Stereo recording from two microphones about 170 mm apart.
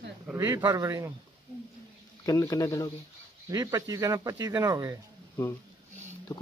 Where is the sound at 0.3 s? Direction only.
15° right (ahead or behind).